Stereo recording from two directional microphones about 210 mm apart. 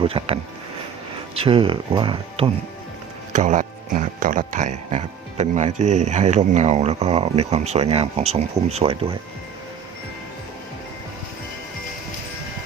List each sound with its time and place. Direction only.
0.0 s speech: 25° right (ahead or behind)
1.4 s speech: 25° right (ahead or behind)
3.3 s speech: 35° right (ahead or behind)